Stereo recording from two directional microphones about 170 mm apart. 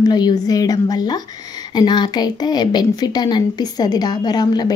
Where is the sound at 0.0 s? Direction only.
25° left (ahead or behind).